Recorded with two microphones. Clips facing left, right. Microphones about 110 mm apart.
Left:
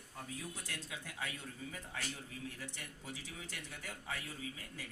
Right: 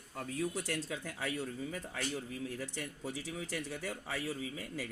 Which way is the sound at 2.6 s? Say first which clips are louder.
Right 8 dB; 75° right (ahead or behind).